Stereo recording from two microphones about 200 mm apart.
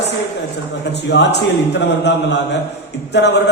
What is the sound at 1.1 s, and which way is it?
A man's voice, 60° left (ahead or behind).